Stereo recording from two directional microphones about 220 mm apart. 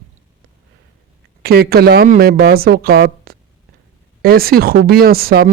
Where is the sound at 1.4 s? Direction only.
45° right (ahead or behind).